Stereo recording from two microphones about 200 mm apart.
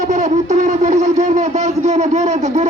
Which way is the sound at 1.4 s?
35° right (ahead or behind).